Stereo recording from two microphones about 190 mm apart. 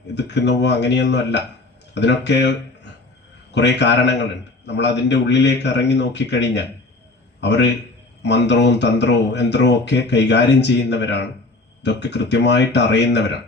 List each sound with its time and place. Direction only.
0.1 s a man's voice: 65° left (ahead or behind)